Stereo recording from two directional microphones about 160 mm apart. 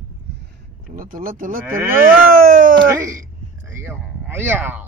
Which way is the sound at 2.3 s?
60° right (ahead or behind).